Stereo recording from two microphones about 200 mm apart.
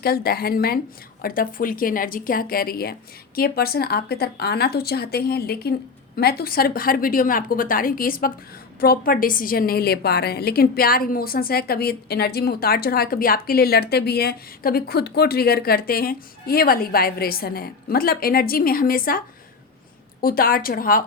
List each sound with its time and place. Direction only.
0.0 s a woman's voice: 50° left (ahead or behind)
20.2 s a woman's voice: 50° left (ahead or behind)